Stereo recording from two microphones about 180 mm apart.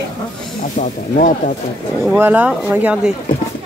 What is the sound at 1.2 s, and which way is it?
Speech, 45° left (ahead or behind).